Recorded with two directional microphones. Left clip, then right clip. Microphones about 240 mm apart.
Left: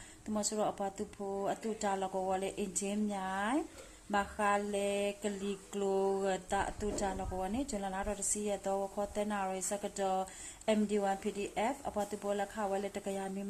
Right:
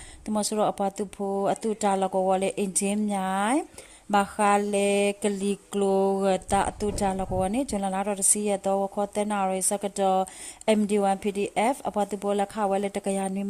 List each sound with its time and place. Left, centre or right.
0.3 s mantra: right